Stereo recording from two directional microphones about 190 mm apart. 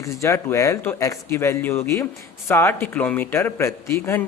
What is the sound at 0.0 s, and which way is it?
A man's voice, 15° left (ahead or behind).